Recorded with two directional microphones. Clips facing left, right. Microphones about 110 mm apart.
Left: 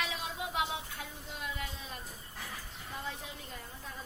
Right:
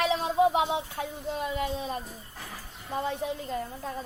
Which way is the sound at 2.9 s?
75° right (ahead or behind).